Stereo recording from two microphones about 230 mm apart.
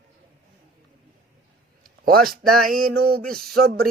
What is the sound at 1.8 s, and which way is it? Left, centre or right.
Speech, right.